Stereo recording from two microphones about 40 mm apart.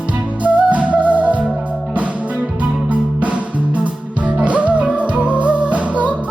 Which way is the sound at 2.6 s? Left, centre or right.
Right.